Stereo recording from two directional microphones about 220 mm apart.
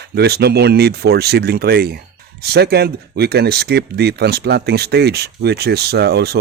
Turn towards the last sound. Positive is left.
turn(degrees=-45)  # may be behind; listen again after turning